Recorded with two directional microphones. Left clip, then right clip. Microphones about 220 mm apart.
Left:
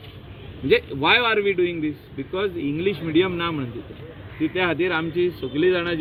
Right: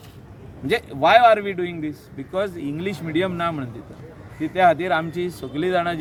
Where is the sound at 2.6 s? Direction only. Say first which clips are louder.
Left 4 dB; 50° right (ahead or behind).